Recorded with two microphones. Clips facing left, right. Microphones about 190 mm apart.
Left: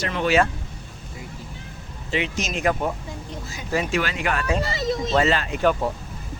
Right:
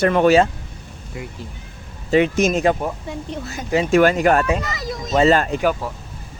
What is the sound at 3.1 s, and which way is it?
Speech, 65° right (ahead or behind).